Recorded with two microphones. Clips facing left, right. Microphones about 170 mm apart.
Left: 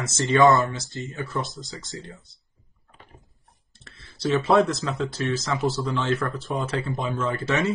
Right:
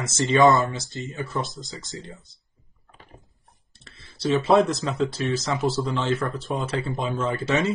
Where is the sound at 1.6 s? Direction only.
20° right (ahead or behind).